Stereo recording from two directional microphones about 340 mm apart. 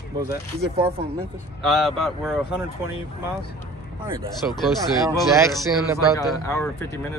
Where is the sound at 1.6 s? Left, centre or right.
Centre.